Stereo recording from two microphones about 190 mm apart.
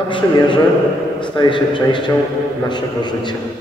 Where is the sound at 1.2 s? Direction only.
25° left (ahead or behind).